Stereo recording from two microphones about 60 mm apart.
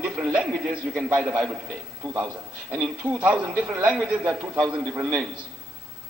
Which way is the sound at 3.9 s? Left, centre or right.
Centre.